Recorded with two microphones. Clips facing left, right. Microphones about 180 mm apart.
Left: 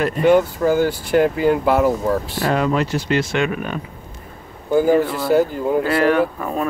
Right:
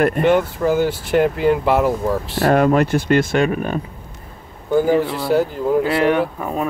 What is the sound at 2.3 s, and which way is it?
Speech, 55° right (ahead or behind).